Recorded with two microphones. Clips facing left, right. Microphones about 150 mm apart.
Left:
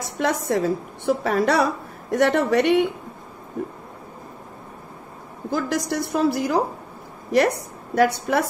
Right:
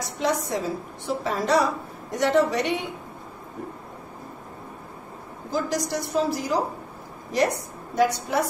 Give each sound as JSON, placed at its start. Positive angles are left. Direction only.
{"t": 0.0, "sound": "a woman's voice", "side_deg": 60}
{"t": 5.5, "sound": "a woman's voice", "side_deg": 60}